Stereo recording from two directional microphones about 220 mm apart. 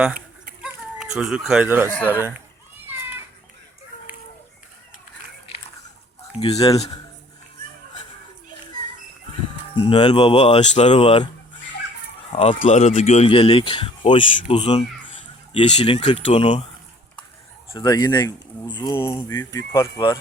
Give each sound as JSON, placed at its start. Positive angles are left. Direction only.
{"t": 0.6, "sound": "chicken", "side_deg": -5}
{"t": 2.0, "sound": "speech", "side_deg": -10}
{"t": 2.7, "sound": "children playing", "side_deg": -10}
{"t": 6.4, "sound": "a man's voice", "side_deg": 25}
{"t": 9.8, "sound": "a man's voice", "side_deg": 20}
{"t": 12.3, "sound": "a man's voice", "side_deg": 25}
{"t": 17.7, "sound": "a man's voice", "side_deg": 20}